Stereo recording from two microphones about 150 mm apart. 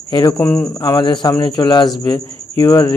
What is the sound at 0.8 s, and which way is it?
Cricket, 25° left (ahead or behind).